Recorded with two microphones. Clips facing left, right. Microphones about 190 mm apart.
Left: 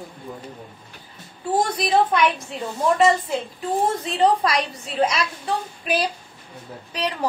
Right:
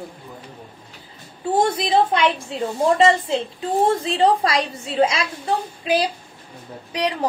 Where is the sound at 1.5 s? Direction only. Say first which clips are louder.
Right 2 dB; 25° right (ahead or behind).